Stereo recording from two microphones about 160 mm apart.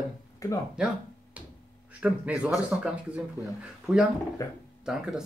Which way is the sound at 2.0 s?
5° right (ahead or behind).